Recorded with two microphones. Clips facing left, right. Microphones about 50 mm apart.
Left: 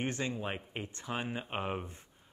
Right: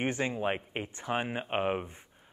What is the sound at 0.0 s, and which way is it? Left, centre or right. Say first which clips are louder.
Speech: right 5 dB; right.